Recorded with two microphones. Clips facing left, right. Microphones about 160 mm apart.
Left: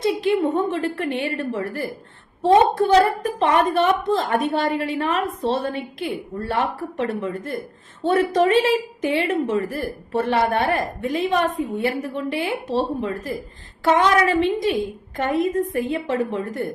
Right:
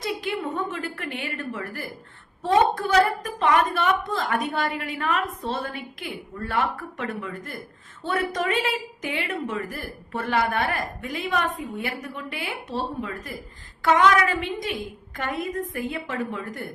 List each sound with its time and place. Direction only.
0.0 s a woman's voice: 25° left (ahead or behind)